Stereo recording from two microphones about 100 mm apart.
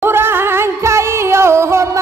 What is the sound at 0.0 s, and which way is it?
Music, 20° right (ahead or behind).